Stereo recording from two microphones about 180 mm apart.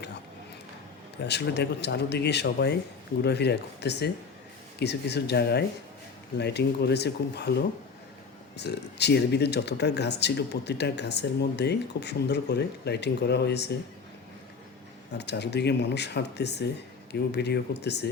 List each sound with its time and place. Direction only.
1.2 s speech: 70° left (ahead or behind)
8.5 s speech: 70° left (ahead or behind)
15.1 s speech: 70° left (ahead or behind)